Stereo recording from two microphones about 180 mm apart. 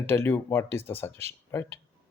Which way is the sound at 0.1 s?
10° left (ahead or behind).